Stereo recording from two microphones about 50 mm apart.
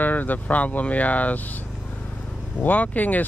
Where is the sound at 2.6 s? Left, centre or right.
Left.